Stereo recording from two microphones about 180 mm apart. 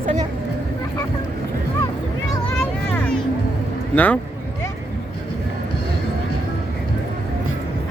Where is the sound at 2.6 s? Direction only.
10° left (ahead or behind).